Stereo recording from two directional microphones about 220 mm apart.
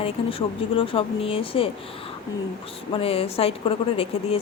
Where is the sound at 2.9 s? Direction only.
25° left (ahead or behind).